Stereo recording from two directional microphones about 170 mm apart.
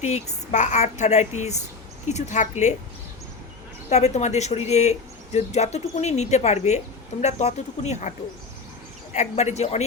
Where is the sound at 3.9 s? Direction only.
40° left (ahead or behind).